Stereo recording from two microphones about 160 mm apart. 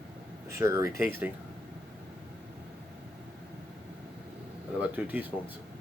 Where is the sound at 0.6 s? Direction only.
20° right (ahead or behind).